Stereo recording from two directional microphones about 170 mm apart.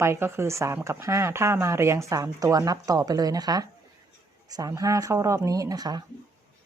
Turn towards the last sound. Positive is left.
turn(degrees=-25)  # may be behind; listen again after turning